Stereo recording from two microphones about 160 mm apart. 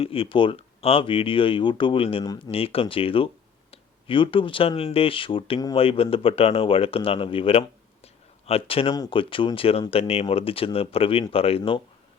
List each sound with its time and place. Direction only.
0.0 s speech: 35° left (ahead or behind)
8.0 s a sound: 40° left (ahead or behind)
9.0 s speech: 35° left (ahead or behind)